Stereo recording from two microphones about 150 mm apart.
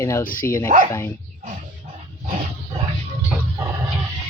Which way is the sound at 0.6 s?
55° right (ahead or behind).